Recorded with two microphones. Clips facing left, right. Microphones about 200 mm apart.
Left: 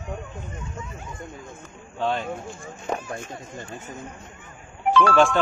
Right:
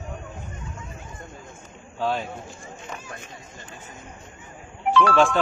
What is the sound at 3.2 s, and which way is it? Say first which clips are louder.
Speech: left 7 dB; 50° left (ahead or behind).